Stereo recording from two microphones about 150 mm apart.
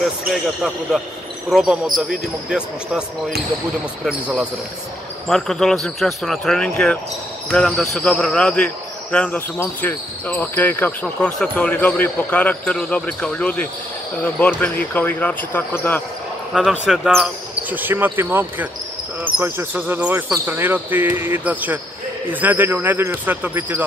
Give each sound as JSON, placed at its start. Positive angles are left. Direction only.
{"t": 0.3, "sound": "speech", "side_deg": 0}
{"t": 16.5, "sound": "speech", "side_deg": -5}